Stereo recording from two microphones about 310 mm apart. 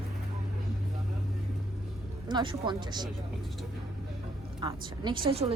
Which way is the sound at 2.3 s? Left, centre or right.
Centre.